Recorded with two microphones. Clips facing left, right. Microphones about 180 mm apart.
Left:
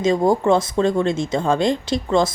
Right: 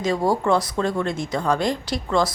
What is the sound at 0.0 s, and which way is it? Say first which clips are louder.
Speech: left 4 dB; 20° left (ahead or behind).